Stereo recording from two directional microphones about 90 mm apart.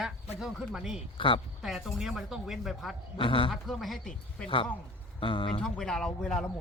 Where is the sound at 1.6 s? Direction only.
5° right (ahead or behind).